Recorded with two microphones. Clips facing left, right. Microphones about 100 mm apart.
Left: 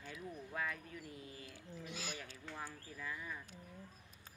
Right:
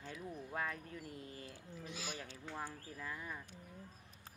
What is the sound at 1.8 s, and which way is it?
Speech, 30° right (ahead or behind).